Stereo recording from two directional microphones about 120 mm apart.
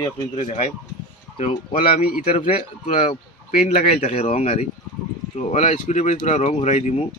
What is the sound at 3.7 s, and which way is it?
Speech, 65° left (ahead or behind).